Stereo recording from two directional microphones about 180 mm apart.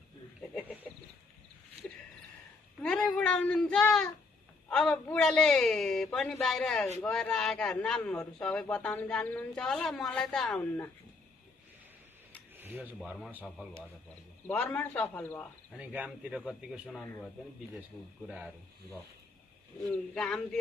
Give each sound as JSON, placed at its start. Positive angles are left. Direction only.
{"t": 0.4, "sound": "speech", "side_deg": 10}
{"t": 2.8, "sound": "a man's voice", "side_deg": 5}
{"t": 12.5, "sound": "a man's voice", "side_deg": -10}
{"t": 14.5, "sound": "speech", "side_deg": 10}
{"t": 15.8, "sound": "a man's voice", "side_deg": -5}
{"t": 18.2, "sound": "a man's voice", "side_deg": -5}
{"t": 19.8, "sound": "a man's voice", "side_deg": 5}